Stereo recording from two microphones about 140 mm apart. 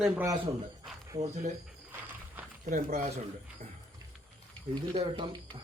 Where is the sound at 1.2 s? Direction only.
55° right (ahead or behind).